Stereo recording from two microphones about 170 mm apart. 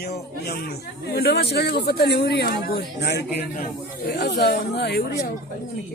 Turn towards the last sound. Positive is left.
turn(degrees=70)  # may be behind; listen again after turning